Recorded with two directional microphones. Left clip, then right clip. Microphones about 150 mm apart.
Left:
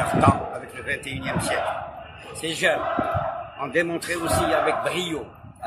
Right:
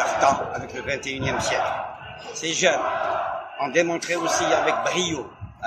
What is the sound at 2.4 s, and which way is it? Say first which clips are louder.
A man's voice: right 2 dB; 15° left (ahead or behind).